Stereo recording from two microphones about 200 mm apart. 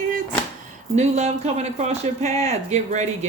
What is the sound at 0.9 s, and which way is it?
Speech, 35° right (ahead or behind).